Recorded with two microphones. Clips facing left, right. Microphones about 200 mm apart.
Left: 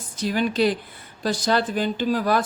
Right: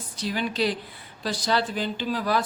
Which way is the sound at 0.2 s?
50° left (ahead or behind).